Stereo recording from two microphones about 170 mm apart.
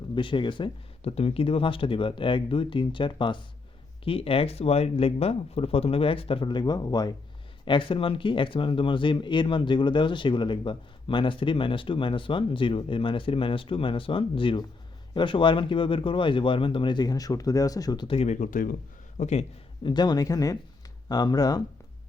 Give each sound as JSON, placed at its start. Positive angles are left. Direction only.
{"t": 0.2, "sound": "speech", "side_deg": 30}
{"t": 19.8, "sound": "speech", "side_deg": 25}